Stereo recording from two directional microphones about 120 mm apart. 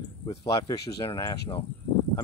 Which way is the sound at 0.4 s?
35° left (ahead or behind).